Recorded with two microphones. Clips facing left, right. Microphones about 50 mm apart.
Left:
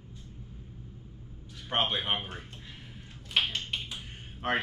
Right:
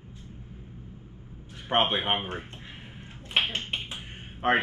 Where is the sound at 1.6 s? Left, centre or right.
Right.